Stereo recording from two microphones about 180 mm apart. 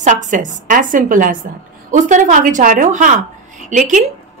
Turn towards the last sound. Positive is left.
turn(degrees=-45)  # may be behind; listen again after turning